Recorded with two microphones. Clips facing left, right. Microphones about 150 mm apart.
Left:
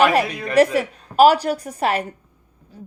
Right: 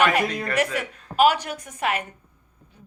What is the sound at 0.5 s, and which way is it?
A woman's voice, 35° left (ahead or behind).